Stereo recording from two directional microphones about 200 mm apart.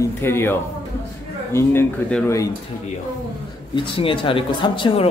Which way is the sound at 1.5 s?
10° left (ahead or behind).